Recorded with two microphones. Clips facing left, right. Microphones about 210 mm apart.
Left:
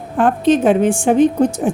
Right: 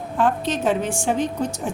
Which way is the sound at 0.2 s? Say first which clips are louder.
Left 8 dB; 55° left (ahead or behind).